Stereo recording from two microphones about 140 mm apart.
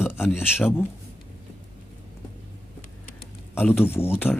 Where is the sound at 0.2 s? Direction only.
5° right (ahead or behind).